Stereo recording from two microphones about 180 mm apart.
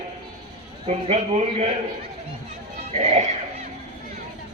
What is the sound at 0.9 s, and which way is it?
Speech, 35° right (ahead or behind).